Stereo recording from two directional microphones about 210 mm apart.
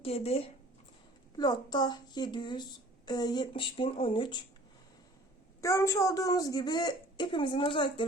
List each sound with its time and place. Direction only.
0.0 s a woman's voice: 30° left (ahead or behind)
5.5 s a woman's voice: 15° left (ahead or behind)